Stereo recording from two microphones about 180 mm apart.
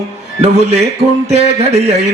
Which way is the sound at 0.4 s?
35° right (ahead or behind).